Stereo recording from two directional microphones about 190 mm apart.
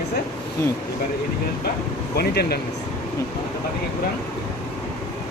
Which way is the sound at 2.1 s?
55° left (ahead or behind).